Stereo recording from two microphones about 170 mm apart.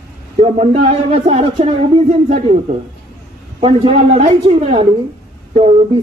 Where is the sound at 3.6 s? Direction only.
35° right (ahead or behind).